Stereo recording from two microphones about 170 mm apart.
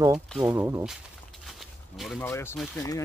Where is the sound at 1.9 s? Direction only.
Centre (ahead or behind).